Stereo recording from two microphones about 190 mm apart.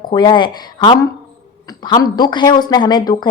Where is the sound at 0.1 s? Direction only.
25° left (ahead or behind).